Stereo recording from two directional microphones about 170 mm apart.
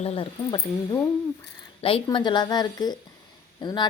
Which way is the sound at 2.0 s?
25° left (ahead or behind).